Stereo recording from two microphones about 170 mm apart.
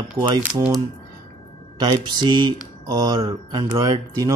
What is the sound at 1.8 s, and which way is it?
A man's voice, 25° right (ahead or behind).